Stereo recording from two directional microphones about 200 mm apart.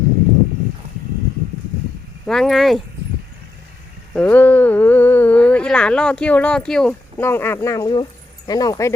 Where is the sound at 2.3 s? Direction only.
Centre (ahead or behind).